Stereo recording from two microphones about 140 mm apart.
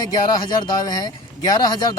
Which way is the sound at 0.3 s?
30° left (ahead or behind).